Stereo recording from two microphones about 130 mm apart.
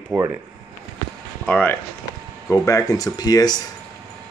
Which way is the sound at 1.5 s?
10° left (ahead or behind).